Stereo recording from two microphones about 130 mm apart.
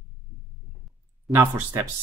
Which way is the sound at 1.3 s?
20° right (ahead or behind).